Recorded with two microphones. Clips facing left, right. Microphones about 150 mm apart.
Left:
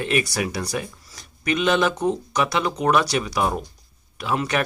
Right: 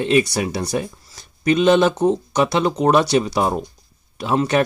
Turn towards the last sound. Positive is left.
turn(degrees=-30)  # may be behind; listen again after turning